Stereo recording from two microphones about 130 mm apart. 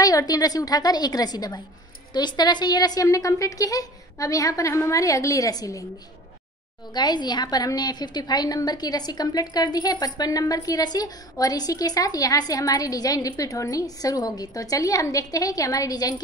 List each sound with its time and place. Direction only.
0.0 s a woman's voice: 30° left (ahead or behind)
6.9 s a woman's voice: 35° left (ahead or behind)